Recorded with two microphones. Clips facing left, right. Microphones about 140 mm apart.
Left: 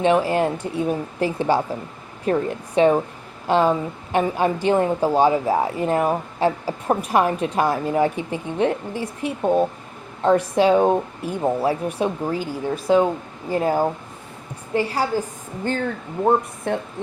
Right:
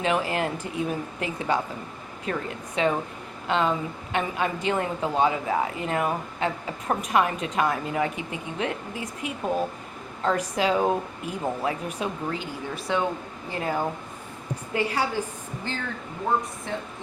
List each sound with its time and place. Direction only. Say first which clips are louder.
0.0 s a woman's voice: left 7 dB; 30° left (ahead or behind)
16.7 s music: left 9 dB; 60° left (ahead or behind)